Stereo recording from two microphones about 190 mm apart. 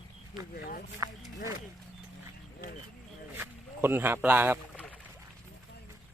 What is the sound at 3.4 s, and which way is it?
Speech, 10° right (ahead or behind).